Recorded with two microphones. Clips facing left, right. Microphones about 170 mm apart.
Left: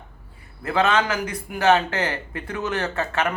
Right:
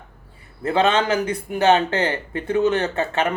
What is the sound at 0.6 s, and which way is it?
Speech, 25° right (ahead or behind).